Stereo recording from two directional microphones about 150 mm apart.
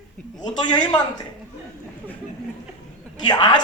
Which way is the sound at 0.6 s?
30° left (ahead or behind).